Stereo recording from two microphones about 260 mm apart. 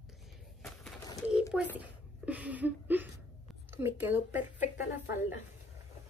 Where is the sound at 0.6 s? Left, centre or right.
Centre.